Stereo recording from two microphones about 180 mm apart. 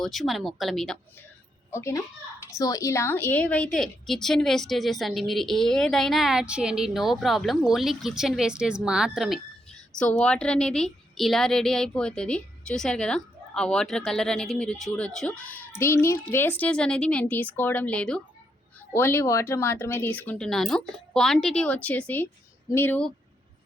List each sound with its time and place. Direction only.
0.0 s a woman's voice: centre (ahead or behind)
1.7 s a woman's voice: 15° left (ahead or behind)